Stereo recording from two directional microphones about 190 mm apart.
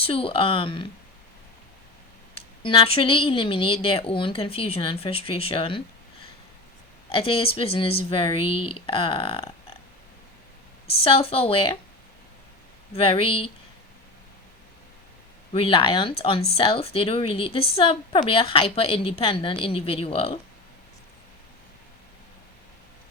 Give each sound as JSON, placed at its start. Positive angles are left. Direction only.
{"t": 0.0, "sound": "a woman's voice", "side_deg": 30}
{"t": 2.3, "sound": "a woman's voice", "side_deg": 30}
{"t": 7.1, "sound": "a woman's voice", "side_deg": 30}
{"t": 10.8, "sound": "a woman's voice", "side_deg": 30}
{"t": 12.9, "sound": "a woman's voice", "side_deg": 30}
{"t": 15.5, "sound": "a woman's voice", "side_deg": 30}